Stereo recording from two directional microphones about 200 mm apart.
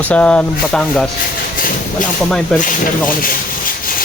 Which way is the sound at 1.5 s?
45° left (ahead or behind).